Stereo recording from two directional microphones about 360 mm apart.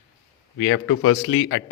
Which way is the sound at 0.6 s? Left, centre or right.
Left.